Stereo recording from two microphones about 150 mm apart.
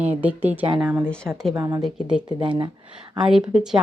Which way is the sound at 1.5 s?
25° right (ahead or behind).